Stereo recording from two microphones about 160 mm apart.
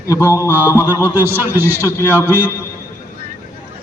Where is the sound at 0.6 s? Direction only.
15° left (ahead or behind).